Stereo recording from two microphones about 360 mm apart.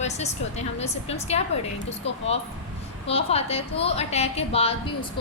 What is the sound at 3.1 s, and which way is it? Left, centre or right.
A woman's voice, centre.